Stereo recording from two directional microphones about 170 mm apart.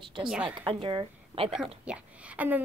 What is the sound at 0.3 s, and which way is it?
Speech, 10° right (ahead or behind).